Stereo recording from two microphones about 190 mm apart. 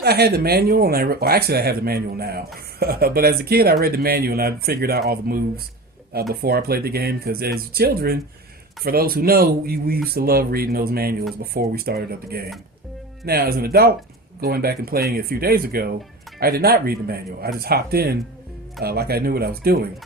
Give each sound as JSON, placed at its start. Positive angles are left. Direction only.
{"t": 0.0, "sound": "speech", "side_deg": -55}
{"t": 6.4, "sound": "speech", "side_deg": -55}